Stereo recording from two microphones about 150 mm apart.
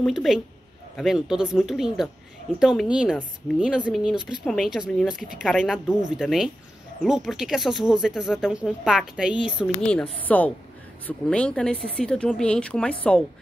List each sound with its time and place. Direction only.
0.0 s speech: centre (ahead or behind)
9.8 s speech: 5° left (ahead or behind)